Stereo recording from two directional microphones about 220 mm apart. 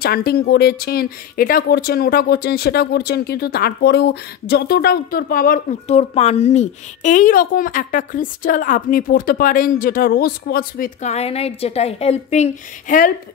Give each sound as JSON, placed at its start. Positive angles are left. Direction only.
{"t": 0.0, "sound": "speech", "side_deg": 45}